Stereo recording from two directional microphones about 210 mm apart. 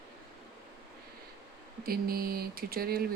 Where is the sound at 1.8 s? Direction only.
45° right (ahead or behind).